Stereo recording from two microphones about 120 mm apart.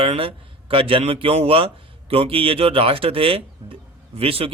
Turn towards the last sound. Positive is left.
turn(degrees=-55)  # may be behind; listen again after turning